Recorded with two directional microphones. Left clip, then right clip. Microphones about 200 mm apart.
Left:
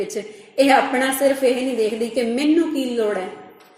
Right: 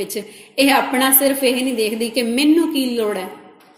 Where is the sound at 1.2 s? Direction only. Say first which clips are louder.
Even; 25° right (ahead or behind).